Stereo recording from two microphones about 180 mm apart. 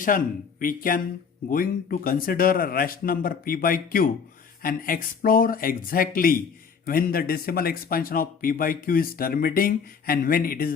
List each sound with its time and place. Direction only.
0.1 s speech: 50° left (ahead or behind)